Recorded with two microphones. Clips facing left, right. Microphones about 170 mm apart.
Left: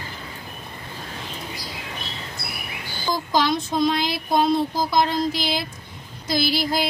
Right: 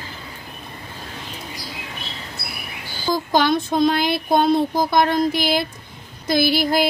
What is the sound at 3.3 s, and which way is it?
Speech, 55° right (ahead or behind).